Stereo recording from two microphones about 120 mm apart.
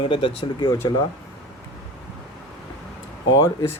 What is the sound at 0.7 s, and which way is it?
Speech, 30° left (ahead or behind).